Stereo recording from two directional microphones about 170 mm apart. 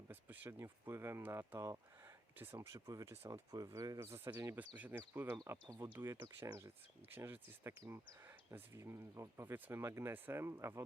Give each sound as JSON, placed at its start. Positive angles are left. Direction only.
{"t": 0.1, "sound": "speech", "side_deg": -10}